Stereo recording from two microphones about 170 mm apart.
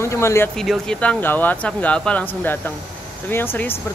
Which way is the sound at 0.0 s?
15° left (ahead or behind).